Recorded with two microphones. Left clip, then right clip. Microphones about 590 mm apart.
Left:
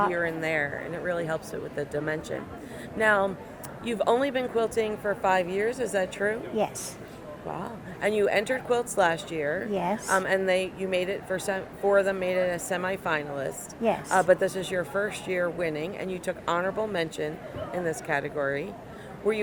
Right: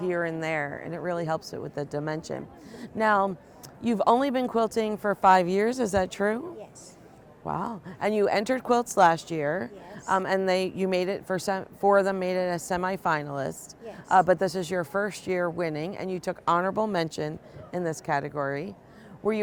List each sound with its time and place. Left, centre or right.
0.1 s a woman's voice: right
7.5 s a woman's voice: right
17.8 s speech: right